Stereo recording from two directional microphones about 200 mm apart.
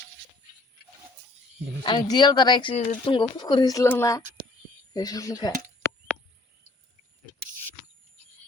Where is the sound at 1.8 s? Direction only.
20° left (ahead or behind).